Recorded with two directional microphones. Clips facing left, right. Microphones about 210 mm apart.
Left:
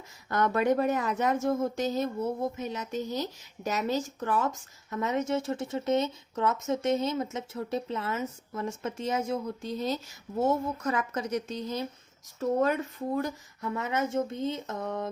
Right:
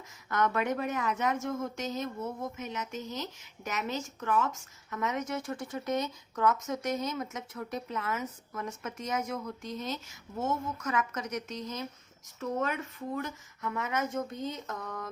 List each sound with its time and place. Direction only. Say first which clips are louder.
0.3 s speech: left 4 dB; 35° left (ahead or behind)